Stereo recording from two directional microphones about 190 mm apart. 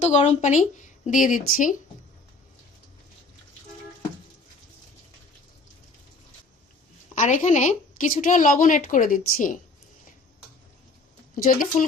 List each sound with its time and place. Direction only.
0.0 s speech: 35° left (ahead or behind)
7.2 s a woman's voice: 40° left (ahead or behind)
11.3 s a woman's voice: 45° left (ahead or behind)